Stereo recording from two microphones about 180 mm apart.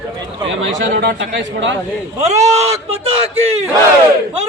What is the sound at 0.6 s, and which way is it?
Speech, 80° right.